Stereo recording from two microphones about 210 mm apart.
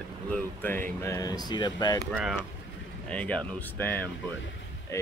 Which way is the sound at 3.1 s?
5° left (ahead or behind).